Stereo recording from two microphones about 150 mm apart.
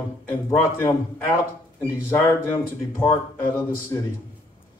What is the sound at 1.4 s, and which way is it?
Speech, 20° left (ahead or behind).